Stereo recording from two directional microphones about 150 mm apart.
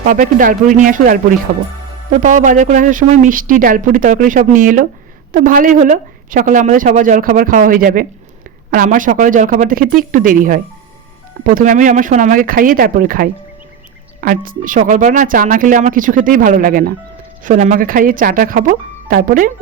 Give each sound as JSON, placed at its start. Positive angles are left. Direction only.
{"t": 0.0, "sound": "speech", "side_deg": -65}
{"t": 17.4, "sound": "speech", "side_deg": -55}